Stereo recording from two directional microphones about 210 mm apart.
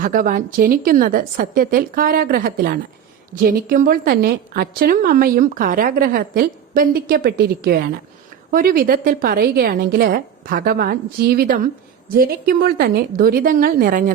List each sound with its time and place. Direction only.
0.0 s a woman's voice: 40° right (ahead or behind)